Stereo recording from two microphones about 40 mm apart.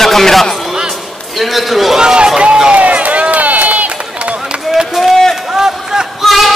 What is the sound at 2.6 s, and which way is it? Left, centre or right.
Run, right.